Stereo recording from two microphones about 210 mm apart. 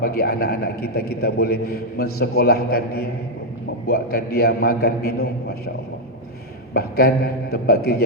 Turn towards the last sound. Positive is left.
turn(degrees=50)  # may be behind; listen again after turning